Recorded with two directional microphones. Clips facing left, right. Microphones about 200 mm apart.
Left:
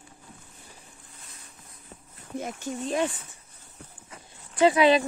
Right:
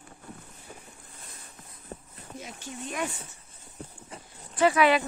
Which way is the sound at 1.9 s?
45° right (ahead or behind).